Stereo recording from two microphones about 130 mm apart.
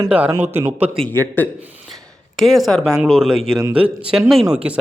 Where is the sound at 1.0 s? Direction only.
15° left (ahead or behind).